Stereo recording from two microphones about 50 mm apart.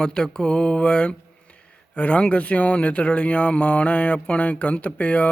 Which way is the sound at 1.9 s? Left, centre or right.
Left.